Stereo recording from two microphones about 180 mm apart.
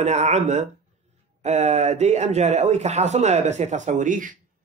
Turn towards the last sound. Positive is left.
turn(degrees=-45)  # may be behind; listen again after turning